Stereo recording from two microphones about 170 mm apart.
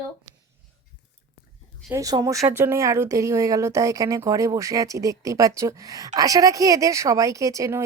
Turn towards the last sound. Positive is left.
turn(degrees=-20)  # may be behind; listen again after turning